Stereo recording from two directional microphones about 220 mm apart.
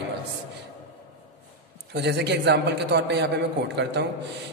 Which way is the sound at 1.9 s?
50° right (ahead or behind).